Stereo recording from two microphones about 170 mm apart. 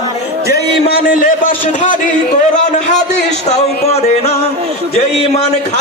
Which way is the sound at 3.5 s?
40° left (ahead or behind).